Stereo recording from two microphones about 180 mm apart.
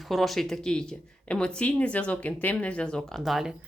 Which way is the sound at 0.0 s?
Centre (ahead or behind).